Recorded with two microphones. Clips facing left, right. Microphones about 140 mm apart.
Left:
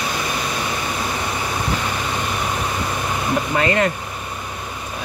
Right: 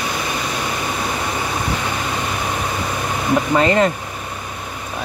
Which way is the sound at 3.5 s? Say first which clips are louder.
Right 3 dB; 30° right (ahead or behind).